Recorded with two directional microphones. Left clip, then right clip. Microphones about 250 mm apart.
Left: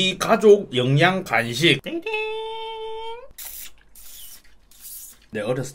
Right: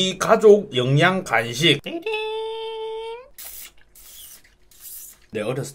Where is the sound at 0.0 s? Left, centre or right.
Centre.